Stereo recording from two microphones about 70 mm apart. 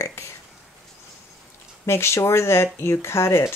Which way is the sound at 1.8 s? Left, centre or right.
Left.